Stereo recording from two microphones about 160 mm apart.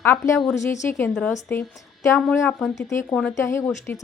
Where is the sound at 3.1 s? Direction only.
5° left (ahead or behind).